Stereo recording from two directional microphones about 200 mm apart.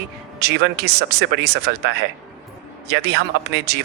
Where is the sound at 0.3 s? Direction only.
55° right (ahead or behind).